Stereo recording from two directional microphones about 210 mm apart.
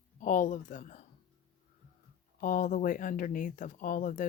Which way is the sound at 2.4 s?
40° left (ahead or behind).